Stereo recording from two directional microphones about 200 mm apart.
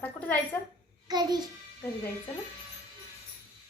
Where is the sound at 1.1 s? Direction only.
20° right (ahead or behind).